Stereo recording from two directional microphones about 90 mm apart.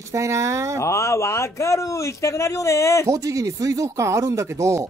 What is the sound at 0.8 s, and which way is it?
Speech, 30° left (ahead or behind).